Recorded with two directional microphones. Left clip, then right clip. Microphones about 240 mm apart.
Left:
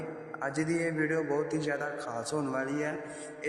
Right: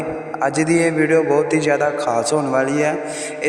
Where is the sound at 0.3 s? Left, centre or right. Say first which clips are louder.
Right 15 dB; right.